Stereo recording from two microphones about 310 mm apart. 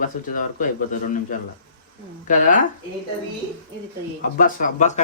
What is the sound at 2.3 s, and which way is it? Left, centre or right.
Speech, left.